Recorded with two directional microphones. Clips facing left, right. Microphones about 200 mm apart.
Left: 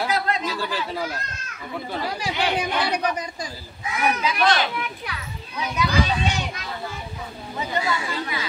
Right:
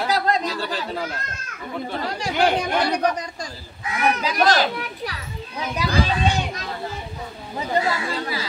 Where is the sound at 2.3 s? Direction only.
45° right (ahead or behind).